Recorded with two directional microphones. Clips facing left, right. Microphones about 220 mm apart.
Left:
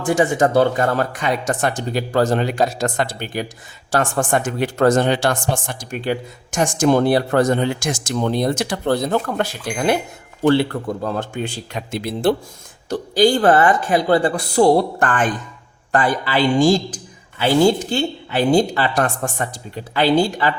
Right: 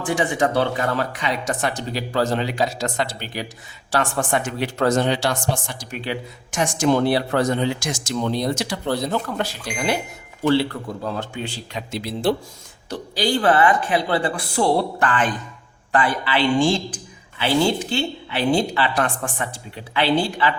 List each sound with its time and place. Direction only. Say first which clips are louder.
0.0 s speech: left 4 dB; 45° left (ahead or behind)